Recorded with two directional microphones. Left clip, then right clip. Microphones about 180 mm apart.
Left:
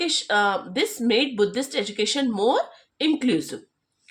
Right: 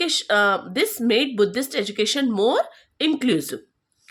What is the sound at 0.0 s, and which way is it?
Speech, 35° right (ahead or behind).